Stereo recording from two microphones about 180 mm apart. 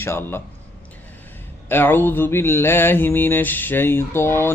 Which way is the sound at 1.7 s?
10° left (ahead or behind).